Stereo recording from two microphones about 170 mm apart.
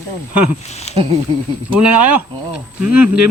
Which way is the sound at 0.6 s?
40° left (ahead or behind).